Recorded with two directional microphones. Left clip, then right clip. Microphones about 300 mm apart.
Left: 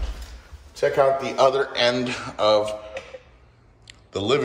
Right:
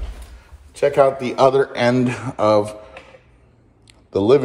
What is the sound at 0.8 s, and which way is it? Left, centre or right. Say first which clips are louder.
Speech: right 4 dB; right.